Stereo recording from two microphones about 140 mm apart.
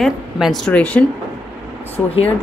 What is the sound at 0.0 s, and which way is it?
Speech, centre (ahead or behind).